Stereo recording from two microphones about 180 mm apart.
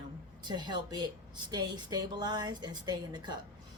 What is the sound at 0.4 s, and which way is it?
Speech, 25° right (ahead or behind).